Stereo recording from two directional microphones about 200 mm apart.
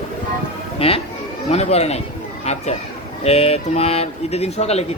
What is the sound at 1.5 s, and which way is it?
Speech, 30° left (ahead or behind).